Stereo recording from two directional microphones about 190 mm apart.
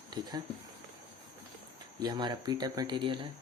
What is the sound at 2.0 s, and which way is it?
Speech, 20° right (ahead or behind).